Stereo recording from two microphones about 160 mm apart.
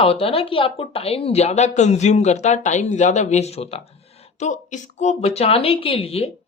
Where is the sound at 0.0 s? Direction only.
35° left (ahead or behind).